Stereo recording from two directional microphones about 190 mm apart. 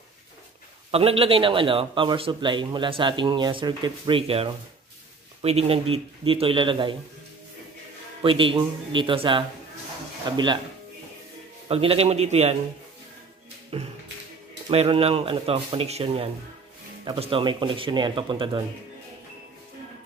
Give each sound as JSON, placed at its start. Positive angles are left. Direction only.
{"t": 0.9, "sound": "a man's voice", "side_deg": -30}
{"t": 8.2, "sound": "a man's voice", "side_deg": -25}
{"t": 11.6, "sound": "speech", "side_deg": -30}
{"t": 13.7, "sound": "a man's voice", "side_deg": -30}